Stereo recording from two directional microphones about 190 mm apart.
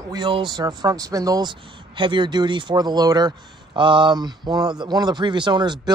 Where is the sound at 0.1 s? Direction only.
25° right (ahead or behind).